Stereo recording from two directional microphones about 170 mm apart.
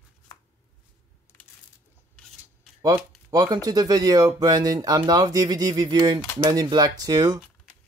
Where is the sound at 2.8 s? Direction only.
20° right (ahead or behind).